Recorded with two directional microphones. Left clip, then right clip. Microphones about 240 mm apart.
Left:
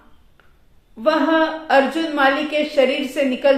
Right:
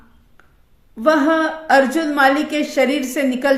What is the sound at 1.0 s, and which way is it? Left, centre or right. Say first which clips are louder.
A woman's voice: right 2 dB; right.